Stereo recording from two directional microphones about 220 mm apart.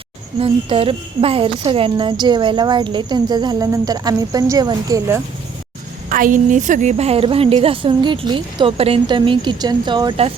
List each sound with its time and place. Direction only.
0.3 s a woman's voice: 25° right (ahead or behind)
6.1 s a woman's voice: 40° right (ahead or behind); by 10.3 s 25° right (ahead or behind)